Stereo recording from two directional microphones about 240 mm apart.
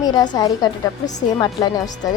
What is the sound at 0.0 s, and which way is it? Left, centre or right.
A woman's voice, centre.